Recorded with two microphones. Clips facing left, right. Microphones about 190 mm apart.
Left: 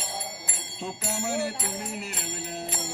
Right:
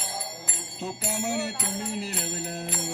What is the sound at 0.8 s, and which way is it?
Speech, 15° right (ahead or behind).